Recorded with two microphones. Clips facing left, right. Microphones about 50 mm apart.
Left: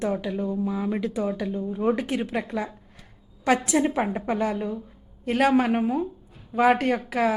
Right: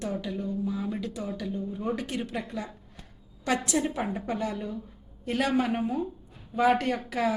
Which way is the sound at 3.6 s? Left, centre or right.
Left.